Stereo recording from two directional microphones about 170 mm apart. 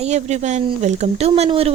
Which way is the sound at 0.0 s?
40° right (ahead or behind).